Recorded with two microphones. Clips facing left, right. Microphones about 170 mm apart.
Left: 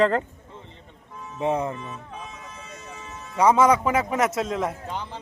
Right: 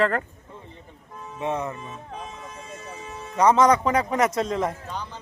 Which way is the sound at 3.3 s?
10° left (ahead or behind).